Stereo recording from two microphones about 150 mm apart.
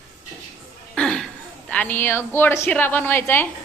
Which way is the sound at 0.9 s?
5° left (ahead or behind).